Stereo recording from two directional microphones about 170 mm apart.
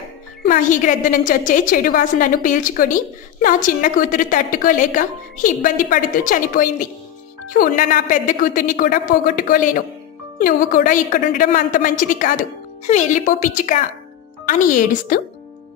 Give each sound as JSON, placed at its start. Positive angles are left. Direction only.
{"t": 0.5, "sound": "a woman's voice", "side_deg": 50}